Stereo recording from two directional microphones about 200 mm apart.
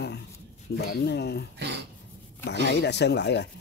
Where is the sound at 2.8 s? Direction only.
55° left (ahead or behind).